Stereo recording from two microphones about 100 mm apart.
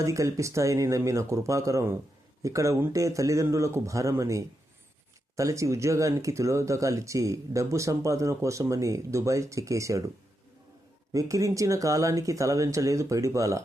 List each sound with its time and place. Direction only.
0.0 s speech: 30° right (ahead or behind)
11.1 s speech: 35° right (ahead or behind)